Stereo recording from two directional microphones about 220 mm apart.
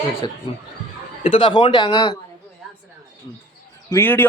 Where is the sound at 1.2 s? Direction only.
25° left (ahead or behind).